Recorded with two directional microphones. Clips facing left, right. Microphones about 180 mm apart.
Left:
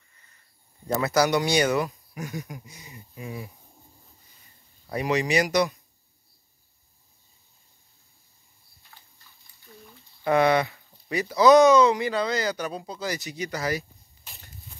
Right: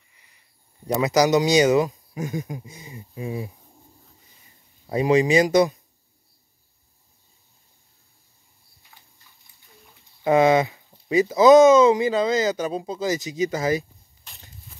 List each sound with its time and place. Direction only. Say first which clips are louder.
0.1 s cricket: even; 15° right (ahead or behind)
0.8 s speech: right 4 dB; 15° right (ahead or behind)
4.8 s speech: right 7 dB; 25° right (ahead or behind)
10.2 s speech: right 4 dB; 20° right (ahead or behind)
14.3 s a sound: left 1 dB; 5° left (ahead or behind)